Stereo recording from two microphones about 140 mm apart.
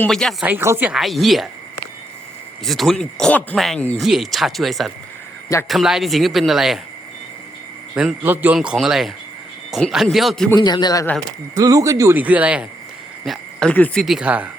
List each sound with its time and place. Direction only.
0.1 s speech: centre (ahead or behind)
0.4 s speech: 15° right (ahead or behind)
0.9 s speech: centre (ahead or behind)
2.6 s speech: centre (ahead or behind)
7.9 s speech: 10° right (ahead or behind)
10.5 s a man's voice: 30° left (ahead or behind)
11.5 s speech: 25° right (ahead or behind)
13.2 s speech: centre (ahead or behind)
14.0 s speech: 5° right (ahead or behind)